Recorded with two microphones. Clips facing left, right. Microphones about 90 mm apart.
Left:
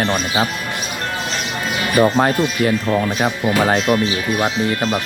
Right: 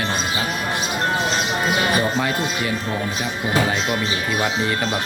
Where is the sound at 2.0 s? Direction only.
45° left (ahead or behind).